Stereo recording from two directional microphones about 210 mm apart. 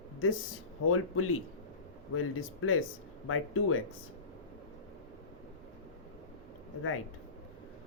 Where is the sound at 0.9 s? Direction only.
90° left.